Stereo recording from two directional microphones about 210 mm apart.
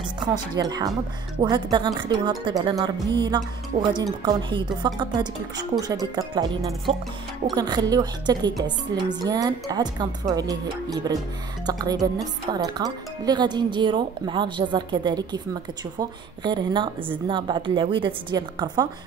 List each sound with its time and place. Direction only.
0.2 s a woman's voice: 20° right (ahead or behind)